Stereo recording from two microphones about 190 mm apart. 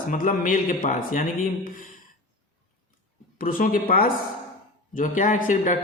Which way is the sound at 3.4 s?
50° left (ahead or behind).